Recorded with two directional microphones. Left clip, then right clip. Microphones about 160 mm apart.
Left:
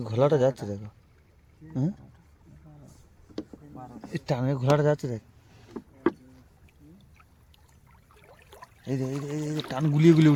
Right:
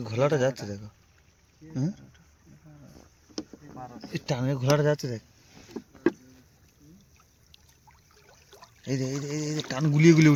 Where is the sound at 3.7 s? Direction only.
25° right (ahead or behind).